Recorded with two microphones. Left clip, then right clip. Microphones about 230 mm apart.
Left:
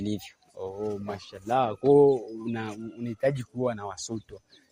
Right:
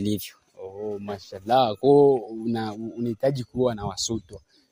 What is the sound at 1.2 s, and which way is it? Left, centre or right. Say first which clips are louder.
Speech: right 5 dB; right.